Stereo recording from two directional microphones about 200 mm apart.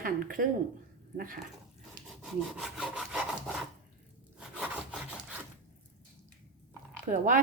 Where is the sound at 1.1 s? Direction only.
45° right (ahead or behind).